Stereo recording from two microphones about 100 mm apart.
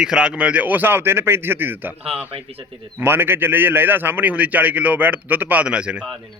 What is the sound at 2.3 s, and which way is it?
Speech, 75° right (ahead or behind).